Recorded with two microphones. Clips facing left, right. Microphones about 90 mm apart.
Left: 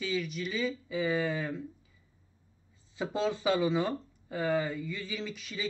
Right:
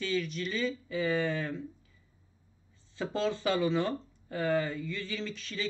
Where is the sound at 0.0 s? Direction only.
5° left (ahead or behind).